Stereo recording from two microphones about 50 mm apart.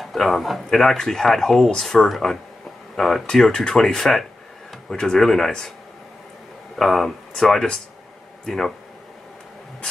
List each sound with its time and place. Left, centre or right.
0.0 s a man's voice: centre
6.8 s speech: centre